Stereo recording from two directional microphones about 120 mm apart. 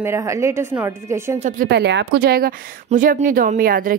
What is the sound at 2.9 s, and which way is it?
Speech, 90° right.